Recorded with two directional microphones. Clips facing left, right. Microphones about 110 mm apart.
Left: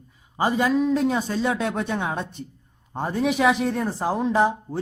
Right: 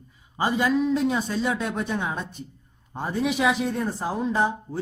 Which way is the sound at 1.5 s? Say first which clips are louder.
Left 2 dB; 60° left (ahead or behind).